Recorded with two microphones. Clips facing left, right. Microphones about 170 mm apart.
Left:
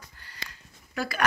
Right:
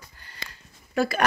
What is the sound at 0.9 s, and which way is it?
Speech, 25° right (ahead or behind).